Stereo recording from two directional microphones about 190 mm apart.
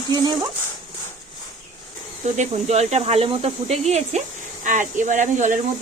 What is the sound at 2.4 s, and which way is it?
Speech, 35° right (ahead or behind).